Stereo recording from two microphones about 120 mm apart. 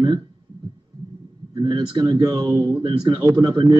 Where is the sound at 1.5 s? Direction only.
35° right (ahead or behind).